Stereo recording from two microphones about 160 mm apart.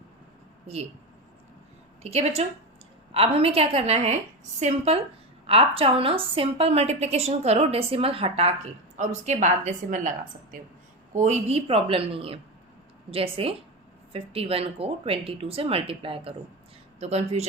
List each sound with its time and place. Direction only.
2.0 s a woman's voice: 40° right (ahead or behind)